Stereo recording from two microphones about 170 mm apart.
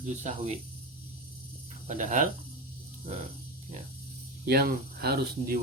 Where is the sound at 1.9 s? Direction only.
50° right (ahead or behind).